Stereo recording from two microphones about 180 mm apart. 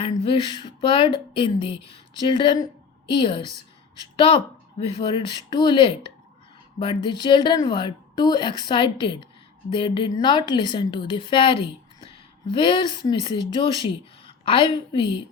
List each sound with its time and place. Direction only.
0.0 s a woman's voice: 30° left (ahead or behind)
4.8 s a woman's voice: 30° left (ahead or behind)